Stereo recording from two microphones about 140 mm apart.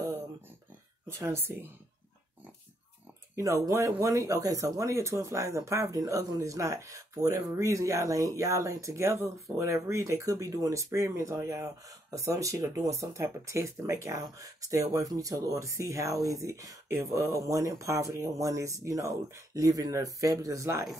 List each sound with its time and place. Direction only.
1.0 s speech: 15° right (ahead or behind)
3.3 s speech: 25° right (ahead or behind)